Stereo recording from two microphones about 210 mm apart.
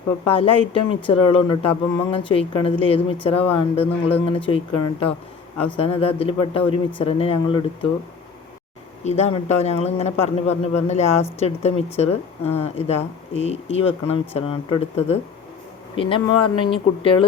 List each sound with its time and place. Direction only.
0.3 s speech: 25° left (ahead or behind)
9.0 s a man's voice: 30° left (ahead or behind)